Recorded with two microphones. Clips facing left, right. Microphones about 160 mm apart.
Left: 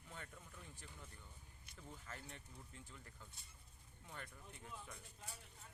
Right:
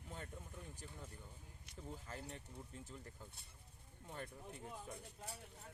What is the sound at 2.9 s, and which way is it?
Speech, 35° right (ahead or behind).